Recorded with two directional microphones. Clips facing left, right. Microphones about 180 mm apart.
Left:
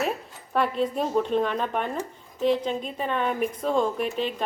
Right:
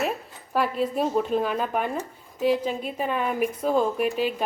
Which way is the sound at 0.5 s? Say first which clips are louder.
Even; 5° right (ahead or behind).